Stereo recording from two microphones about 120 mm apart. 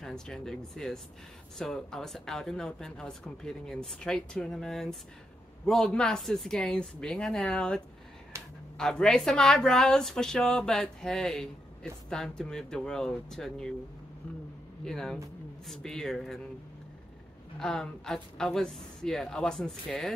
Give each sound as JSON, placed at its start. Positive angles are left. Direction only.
{"t": 0.0, "sound": "a woman's voice", "side_deg": 5}
{"t": 8.3, "sound": "a sound", "side_deg": -25}
{"t": 8.7, "sound": "a woman's voice", "side_deg": 5}
{"t": 14.9, "sound": "a woman's voice", "side_deg": 5}
{"t": 17.6, "sound": "a woman's voice", "side_deg": 5}